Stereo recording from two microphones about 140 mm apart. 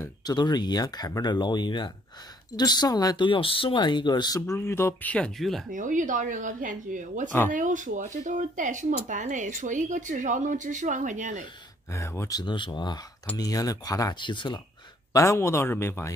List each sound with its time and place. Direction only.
0.0 s speech: 30° left (ahead or behind); by 5.7 s centre (ahead or behind)
5.7 s speech: 65° right (ahead or behind)
7.2 s speech: 15° left (ahead or behind)
7.5 s speech: 65° right (ahead or behind)
11.9 s speech: 20° left (ahead or behind); by 14.6 s 35° left (ahead or behind)
15.1 s speech: 20° left (ahead or behind)